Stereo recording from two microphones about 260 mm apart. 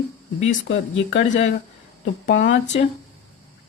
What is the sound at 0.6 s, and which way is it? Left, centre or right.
Speech, left.